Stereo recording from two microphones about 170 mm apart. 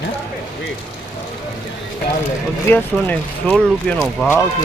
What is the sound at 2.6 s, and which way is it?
Speech, 10° left (ahead or behind).